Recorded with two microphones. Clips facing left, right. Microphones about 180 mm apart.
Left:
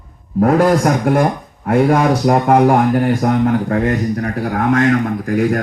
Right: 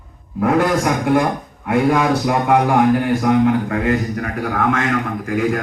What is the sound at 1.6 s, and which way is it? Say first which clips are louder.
A man's voice: left 3 dB; 40° left (ahead or behind).